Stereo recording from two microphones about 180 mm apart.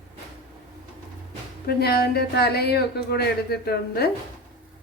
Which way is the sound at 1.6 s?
60° left (ahead or behind).